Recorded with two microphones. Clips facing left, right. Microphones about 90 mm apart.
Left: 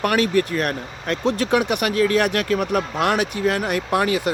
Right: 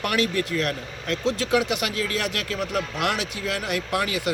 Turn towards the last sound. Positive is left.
turn(degrees=40)  # may be behind; listen again after turning